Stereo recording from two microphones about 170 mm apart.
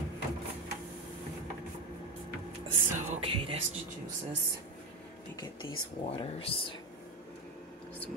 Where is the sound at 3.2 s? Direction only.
35° right (ahead or behind).